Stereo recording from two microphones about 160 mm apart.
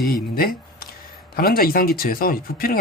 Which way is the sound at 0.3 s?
70° left (ahead or behind).